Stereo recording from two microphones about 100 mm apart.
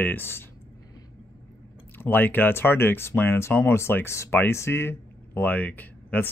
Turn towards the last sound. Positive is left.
turn(degrees=15)  # may be behind; listen again after turning